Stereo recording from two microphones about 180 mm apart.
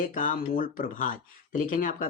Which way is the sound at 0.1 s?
50° left (ahead or behind).